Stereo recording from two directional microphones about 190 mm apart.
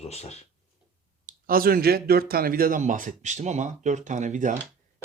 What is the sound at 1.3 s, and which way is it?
Speech, 50° right (ahead or behind).